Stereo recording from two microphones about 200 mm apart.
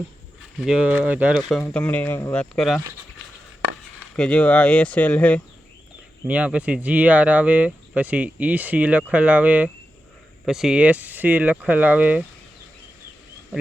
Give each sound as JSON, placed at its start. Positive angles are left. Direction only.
{"t": 0.6, "sound": "speech", "side_deg": -5}
{"t": 4.1, "sound": "speech", "side_deg": 5}
{"t": 6.2, "sound": "speech", "side_deg": -5}